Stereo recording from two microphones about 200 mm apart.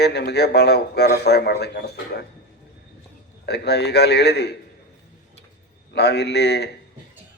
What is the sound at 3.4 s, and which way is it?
A man's voice, 55° left (ahead or behind).